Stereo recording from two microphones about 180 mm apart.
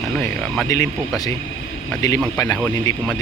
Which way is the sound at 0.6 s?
15° left (ahead or behind).